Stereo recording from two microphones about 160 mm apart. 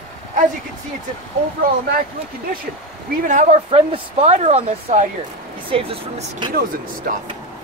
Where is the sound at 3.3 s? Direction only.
45° right (ahead or behind).